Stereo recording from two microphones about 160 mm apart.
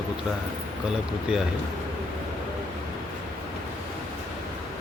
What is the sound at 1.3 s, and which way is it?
Speech, 5° right (ahead or behind).